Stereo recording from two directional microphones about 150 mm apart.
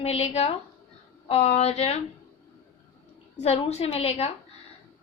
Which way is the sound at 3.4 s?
45° left (ahead or behind).